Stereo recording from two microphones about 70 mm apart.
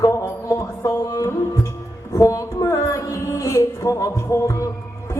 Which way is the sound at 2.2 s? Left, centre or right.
Left.